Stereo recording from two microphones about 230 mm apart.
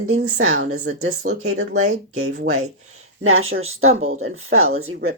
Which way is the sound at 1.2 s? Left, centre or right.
Right.